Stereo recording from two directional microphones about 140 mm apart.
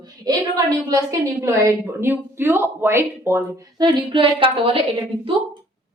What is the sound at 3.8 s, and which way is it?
A woman's voice, 35° right (ahead or behind).